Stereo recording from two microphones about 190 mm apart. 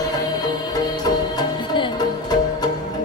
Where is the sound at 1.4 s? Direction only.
25° left (ahead or behind).